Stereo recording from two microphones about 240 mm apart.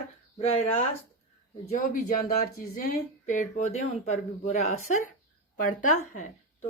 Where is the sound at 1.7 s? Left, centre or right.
Left.